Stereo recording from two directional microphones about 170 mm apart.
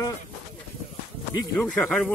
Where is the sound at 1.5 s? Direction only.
5° left (ahead or behind).